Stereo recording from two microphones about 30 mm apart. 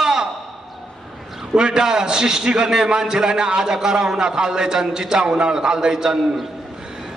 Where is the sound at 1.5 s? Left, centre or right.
Right.